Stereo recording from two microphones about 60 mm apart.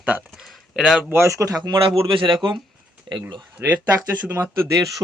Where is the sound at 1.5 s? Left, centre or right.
Right.